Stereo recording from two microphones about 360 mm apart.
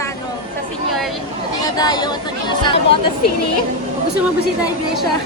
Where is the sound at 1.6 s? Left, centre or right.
Centre.